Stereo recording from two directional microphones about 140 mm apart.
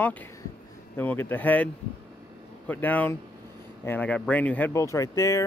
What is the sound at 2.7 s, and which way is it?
Speech, 10° left (ahead or behind).